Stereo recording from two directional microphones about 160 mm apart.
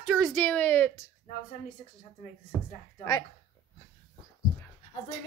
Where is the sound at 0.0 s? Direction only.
Centre (ahead or behind).